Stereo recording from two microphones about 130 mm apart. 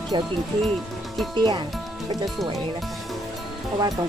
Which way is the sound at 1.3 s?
35° right (ahead or behind).